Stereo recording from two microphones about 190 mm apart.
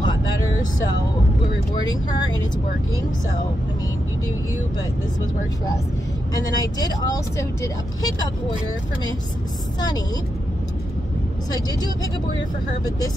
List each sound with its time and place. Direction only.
6.3 s speech: 20° left (ahead or behind)